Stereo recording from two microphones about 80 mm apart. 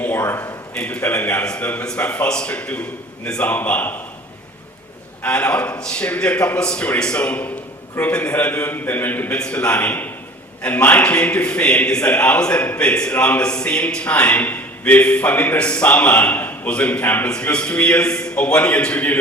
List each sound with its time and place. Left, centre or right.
0.2 s a man's voice: left
0.8 s a man's voice: centre
5.2 s a man's voice: centre